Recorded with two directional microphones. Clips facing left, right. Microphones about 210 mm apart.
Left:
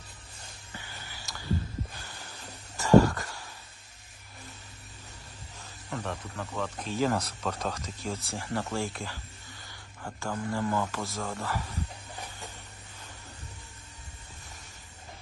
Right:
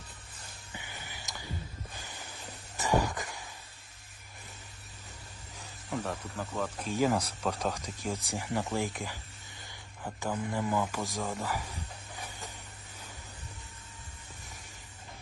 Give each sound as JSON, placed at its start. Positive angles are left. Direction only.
{"t": 0.7, "sound": "a sound", "side_deg": -15}
{"t": 5.9, "sound": "speech", "side_deg": -5}
{"t": 10.2, "sound": "speech", "side_deg": -15}